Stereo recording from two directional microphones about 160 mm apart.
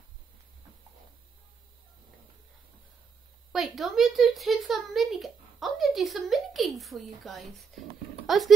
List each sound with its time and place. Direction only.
3.5 s speech: centre (ahead or behind)